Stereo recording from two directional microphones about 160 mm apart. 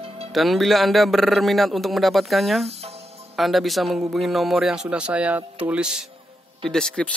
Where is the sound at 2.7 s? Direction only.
40° right (ahead or behind).